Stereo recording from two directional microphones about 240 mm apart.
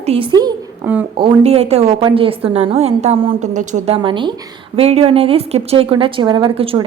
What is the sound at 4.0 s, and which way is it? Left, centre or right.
A woman's voice, centre.